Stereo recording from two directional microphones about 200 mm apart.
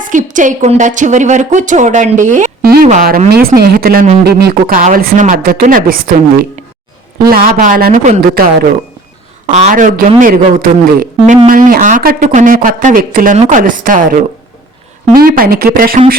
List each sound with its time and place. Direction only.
0.0 s speech: 40° right (ahead or behind)
3.5 s speech: 50° right (ahead or behind)
4.4 s speech: 50° right (ahead or behind)
9.5 s speech: 40° right (ahead or behind)